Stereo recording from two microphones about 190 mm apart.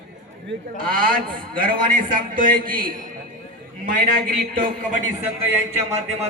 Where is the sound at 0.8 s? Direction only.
50° right (ahead or behind).